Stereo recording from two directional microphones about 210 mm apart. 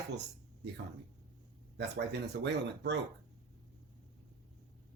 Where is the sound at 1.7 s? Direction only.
55° right (ahead or behind).